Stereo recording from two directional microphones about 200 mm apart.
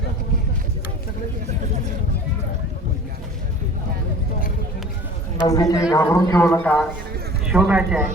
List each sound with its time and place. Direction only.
5.5 s a man's voice: 15° left (ahead or behind)
7.5 s a man's voice: 5° right (ahead or behind)